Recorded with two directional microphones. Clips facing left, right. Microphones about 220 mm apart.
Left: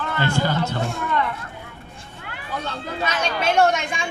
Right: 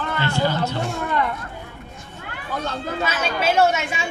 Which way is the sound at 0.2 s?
50° left (ahead or behind).